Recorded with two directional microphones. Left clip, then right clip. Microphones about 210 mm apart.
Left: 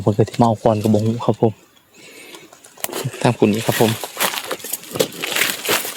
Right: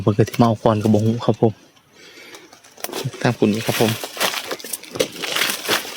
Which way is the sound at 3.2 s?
10° left (ahead or behind).